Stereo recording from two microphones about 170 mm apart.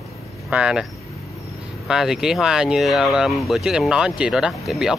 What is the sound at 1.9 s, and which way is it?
Speech, 5° right (ahead or behind).